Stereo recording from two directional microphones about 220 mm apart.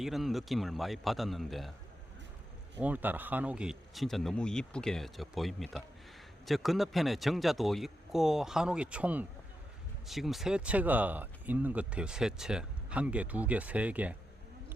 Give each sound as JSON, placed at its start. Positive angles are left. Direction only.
{"t": 0.0, "sound": "speech", "side_deg": 0}
{"t": 2.8, "sound": "speech", "side_deg": -5}